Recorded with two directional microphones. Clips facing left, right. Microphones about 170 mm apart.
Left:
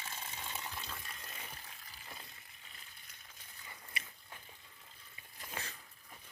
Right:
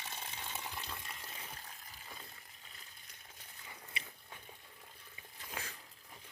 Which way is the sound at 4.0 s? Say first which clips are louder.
Left 1 dB; 25° right (ahead or behind).